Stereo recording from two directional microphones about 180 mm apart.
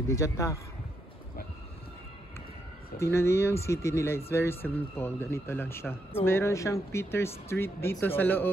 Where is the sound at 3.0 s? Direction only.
15° left (ahead or behind).